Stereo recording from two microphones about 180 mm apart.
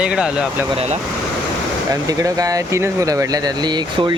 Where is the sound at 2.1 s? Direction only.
20° right (ahead or behind).